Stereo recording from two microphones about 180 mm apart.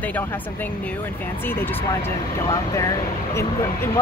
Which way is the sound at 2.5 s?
20° left (ahead or behind).